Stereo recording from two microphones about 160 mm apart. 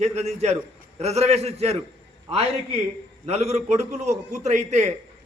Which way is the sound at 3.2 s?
45° right (ahead or behind).